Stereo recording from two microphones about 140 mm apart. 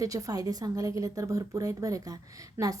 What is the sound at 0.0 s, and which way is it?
A woman's voice, 25° right (ahead or behind).